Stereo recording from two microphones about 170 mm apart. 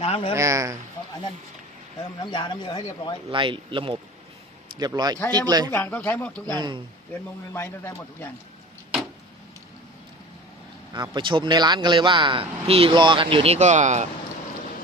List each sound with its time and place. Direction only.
0.0 s a man's voice: 35° left (ahead or behind)
0.3 s speech: 20° right (ahead or behind)
2.1 s speech: 25° left (ahead or behind)
3.2 s speech: 30° right (ahead or behind)
5.7 s speech: 15° left (ahead or behind)
6.5 s speech: 25° right (ahead or behind)
7.1 s speech: 15° left (ahead or behind)
10.9 s speech: 25° right (ahead or behind); by 14.1 s 45° right (ahead or behind)